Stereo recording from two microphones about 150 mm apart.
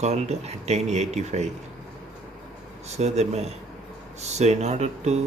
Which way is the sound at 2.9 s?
45° right (ahead or behind).